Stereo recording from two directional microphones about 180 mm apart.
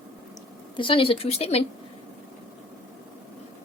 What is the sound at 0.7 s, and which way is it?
Speech, 25° left (ahead or behind).